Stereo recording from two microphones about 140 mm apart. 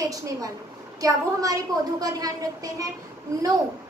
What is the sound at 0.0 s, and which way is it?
A woman's voice, 25° right (ahead or behind).